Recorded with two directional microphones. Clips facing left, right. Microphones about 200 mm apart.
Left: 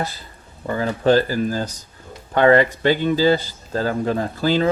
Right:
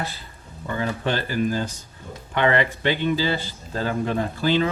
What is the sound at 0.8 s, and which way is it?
Speech, 40° left (ahead or behind).